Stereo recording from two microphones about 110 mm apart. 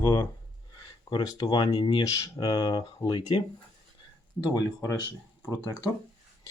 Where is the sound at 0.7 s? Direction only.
35° left (ahead or behind).